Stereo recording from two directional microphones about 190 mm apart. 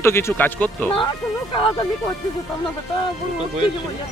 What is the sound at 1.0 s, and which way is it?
Speech, 25° left (ahead or behind).